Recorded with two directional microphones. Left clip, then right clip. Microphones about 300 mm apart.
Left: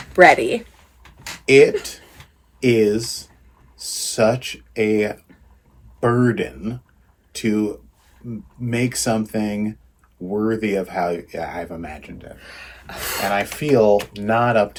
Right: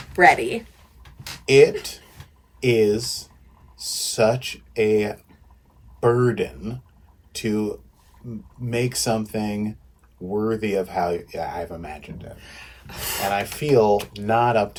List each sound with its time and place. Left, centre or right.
0.1 s speech: centre
1.5 s speech: centre
12.4 s speech: centre
13.2 s speech: centre